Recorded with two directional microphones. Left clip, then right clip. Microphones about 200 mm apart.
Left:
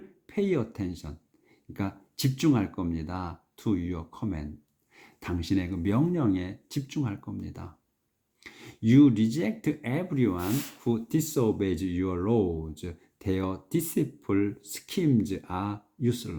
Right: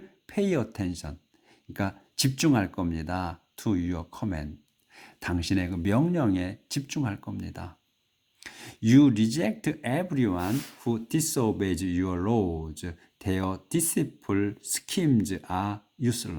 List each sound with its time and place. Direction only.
0.3 s speech: 30° right (ahead or behind)